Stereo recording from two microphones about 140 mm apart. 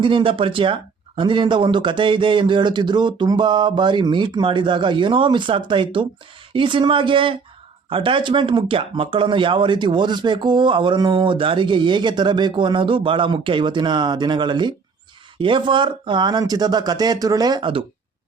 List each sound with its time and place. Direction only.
0.0 s speech: 35° right (ahead or behind)